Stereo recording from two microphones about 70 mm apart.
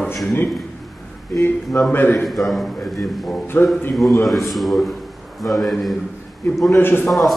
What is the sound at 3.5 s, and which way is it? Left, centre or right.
Speech, left.